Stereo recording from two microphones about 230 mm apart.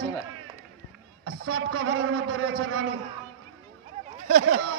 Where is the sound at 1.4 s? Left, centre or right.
Right.